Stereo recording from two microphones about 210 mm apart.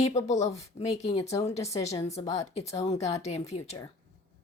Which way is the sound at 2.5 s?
30° left (ahead or behind).